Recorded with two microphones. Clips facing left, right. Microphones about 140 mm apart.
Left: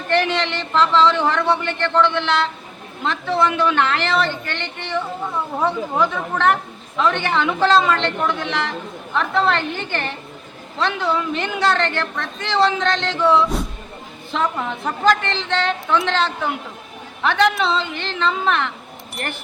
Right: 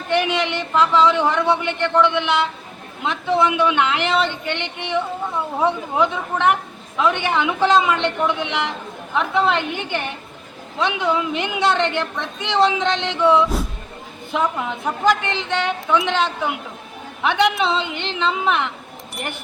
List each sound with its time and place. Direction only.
0.1 s a woman's voice: 10° right (ahead or behind)